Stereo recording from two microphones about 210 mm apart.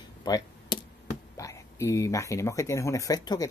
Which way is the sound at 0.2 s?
20° left (ahead or behind).